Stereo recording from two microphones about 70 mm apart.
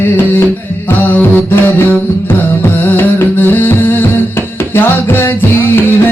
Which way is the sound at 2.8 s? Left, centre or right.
Left.